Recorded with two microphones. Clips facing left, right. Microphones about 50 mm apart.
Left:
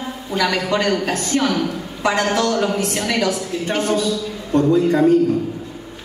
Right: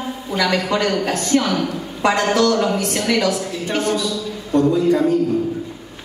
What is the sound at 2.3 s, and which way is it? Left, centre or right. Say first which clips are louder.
A woman's voice: right 2 dB; left.